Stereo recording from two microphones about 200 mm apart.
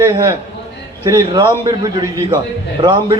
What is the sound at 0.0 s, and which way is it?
A man's voice, 20° right (ahead or behind).